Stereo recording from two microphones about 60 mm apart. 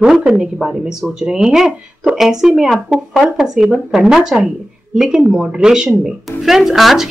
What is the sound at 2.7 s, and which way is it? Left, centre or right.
Speech, centre.